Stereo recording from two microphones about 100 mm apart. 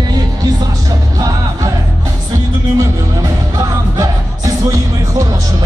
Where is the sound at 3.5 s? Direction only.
40° right (ahead or behind).